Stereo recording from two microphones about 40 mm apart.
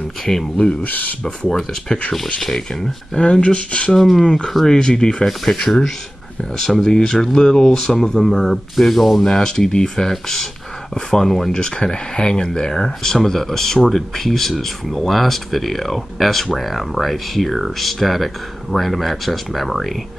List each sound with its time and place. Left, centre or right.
0.2 s speech: centre
0.8 s speech: left
1.2 s speech: centre
3.2 s speech: left
3.9 s speech: centre
5.2 s speech: centre
9.2 s speech: centre
11.5 s speech: left; by 20.0 s centre